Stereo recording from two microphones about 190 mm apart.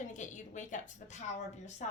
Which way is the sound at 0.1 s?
40° left (ahead or behind).